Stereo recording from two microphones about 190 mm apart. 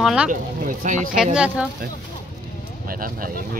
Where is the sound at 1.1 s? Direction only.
5° right (ahead or behind).